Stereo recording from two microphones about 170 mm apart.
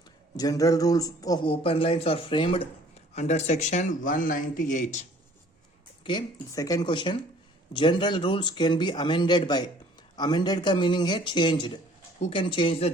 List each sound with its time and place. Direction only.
0.3 s speech: 20° left (ahead or behind)
1.5 s speech: 35° left (ahead or behind)
3.2 s speech: 40° left (ahead or behind)
6.1 s speech: 20° left (ahead or behind)